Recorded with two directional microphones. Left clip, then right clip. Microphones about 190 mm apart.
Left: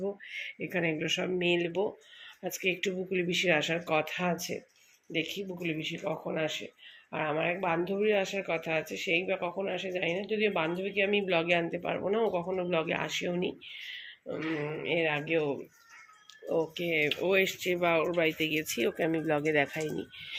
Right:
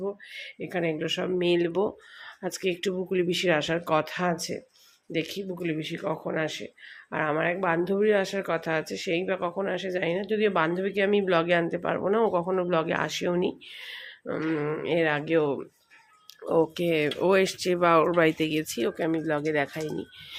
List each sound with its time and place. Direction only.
0.6 s speech: 5° right (ahead or behind)
1.4 s speech: 25° right (ahead or behind)
5.1 s speech: 70° right (ahead or behind)
5.4 s speech: 25° right (ahead or behind)
8.8 s speech: 80° right
9.0 s speech: 25° right (ahead or behind)
18.6 s speech: 10° right (ahead or behind)